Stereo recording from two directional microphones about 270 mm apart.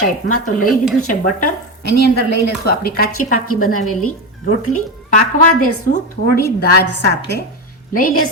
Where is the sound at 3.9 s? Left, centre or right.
Left.